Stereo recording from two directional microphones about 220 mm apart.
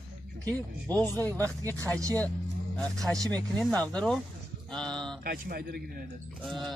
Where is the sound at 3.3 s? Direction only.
5° left (ahead or behind).